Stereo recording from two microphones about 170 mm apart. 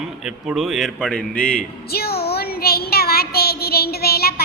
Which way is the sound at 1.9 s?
65° left (ahead or behind).